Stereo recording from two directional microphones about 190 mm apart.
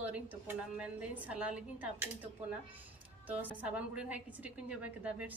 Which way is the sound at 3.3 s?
10° right (ahead or behind).